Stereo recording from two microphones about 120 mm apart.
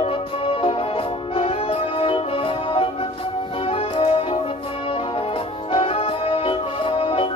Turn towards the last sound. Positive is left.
turn(degrees=50)  # may be behind; listen again after turning